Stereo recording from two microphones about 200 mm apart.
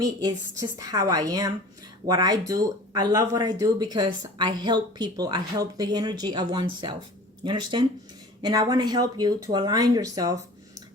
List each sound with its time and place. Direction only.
0.0 s a woman's voice: 20° right (ahead or behind)